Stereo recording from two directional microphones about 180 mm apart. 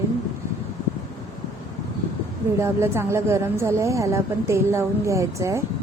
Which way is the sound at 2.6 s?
15° right (ahead or behind).